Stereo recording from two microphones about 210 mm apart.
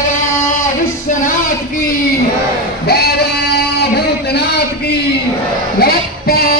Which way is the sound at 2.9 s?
50° left (ahead or behind).